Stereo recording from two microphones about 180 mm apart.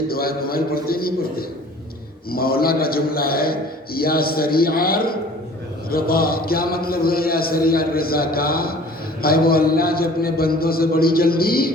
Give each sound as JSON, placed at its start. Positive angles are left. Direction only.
{"t": 0.1, "sound": "a man's voice", "side_deg": 55}